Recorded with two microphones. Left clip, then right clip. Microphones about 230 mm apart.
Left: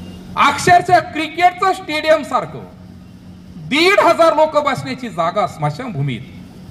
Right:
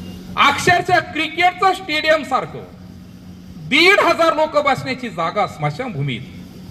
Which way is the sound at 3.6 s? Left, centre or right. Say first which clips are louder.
Left 1 dB; left.